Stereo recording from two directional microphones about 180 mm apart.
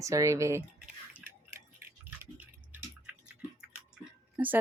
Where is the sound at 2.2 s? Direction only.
10° right (ahead or behind).